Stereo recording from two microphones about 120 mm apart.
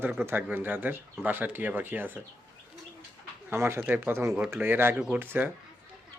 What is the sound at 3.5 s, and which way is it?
Speech, 20° right (ahead or behind).